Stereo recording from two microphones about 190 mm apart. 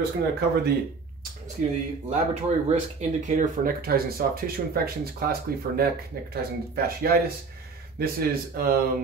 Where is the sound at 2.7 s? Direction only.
40° right (ahead or behind).